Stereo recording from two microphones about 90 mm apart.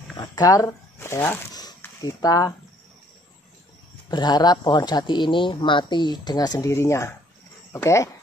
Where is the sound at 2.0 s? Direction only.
45° left (ahead or behind).